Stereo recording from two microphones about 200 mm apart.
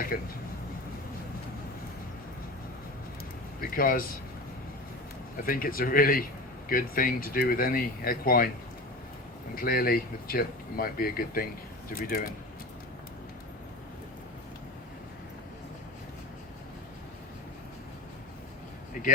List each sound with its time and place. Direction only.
0.1 s speech: 50° left (ahead or behind)
3.6 s speech: 45° left (ahead or behind)
5.4 s speech: 45° left (ahead or behind)
9.6 s speech: 45° left (ahead or behind)
19.0 s a sound: 40° left (ahead or behind)